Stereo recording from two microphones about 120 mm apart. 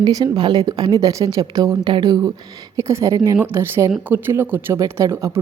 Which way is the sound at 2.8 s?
25° right (ahead or behind).